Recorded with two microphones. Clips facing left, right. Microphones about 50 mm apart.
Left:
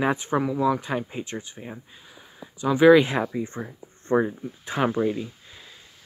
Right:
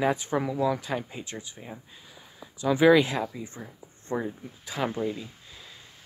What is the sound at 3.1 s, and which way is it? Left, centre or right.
Speech, left.